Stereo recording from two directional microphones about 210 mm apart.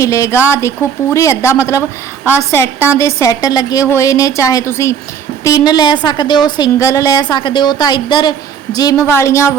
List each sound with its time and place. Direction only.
0.0 s a woman's voice: 15° left (ahead or behind)